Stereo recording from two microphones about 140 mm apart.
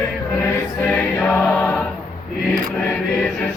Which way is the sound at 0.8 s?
15° left (ahead or behind).